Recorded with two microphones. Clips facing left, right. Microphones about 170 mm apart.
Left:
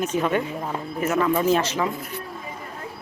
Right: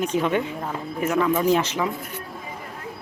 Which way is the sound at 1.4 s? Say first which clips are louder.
Even; 15° right (ahead or behind).